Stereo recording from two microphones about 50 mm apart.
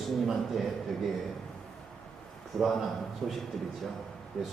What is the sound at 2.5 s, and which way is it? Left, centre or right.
Speech, centre.